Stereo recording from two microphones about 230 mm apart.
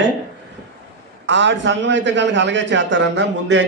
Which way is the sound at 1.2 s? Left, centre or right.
Right.